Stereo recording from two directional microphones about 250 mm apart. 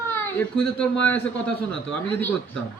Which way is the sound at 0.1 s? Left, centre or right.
Centre.